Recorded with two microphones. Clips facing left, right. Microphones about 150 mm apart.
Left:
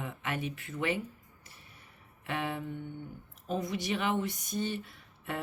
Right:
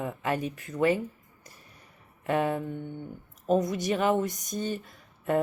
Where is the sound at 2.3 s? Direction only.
45° right (ahead or behind).